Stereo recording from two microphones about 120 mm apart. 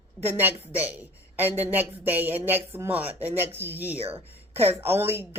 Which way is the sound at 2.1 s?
15° right (ahead or behind).